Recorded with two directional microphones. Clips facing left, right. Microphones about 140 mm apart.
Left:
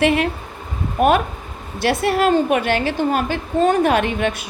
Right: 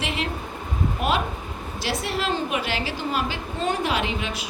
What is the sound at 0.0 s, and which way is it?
A woman's voice, 55° left (ahead or behind).